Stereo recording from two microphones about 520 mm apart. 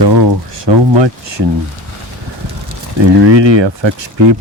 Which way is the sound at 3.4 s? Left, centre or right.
Right.